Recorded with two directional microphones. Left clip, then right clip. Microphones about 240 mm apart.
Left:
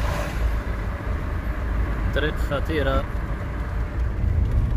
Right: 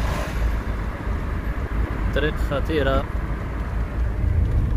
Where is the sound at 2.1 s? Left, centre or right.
Centre.